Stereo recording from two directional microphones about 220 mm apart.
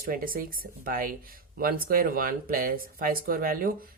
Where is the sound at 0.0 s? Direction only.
40° right (ahead or behind).